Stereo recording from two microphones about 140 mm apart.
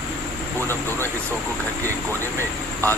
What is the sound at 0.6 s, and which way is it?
Speech, 15° left (ahead or behind).